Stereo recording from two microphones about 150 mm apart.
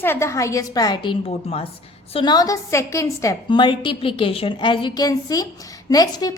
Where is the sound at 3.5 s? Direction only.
35° left (ahead or behind).